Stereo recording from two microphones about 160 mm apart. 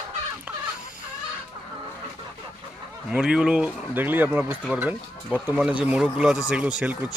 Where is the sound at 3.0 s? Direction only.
5° right (ahead or behind).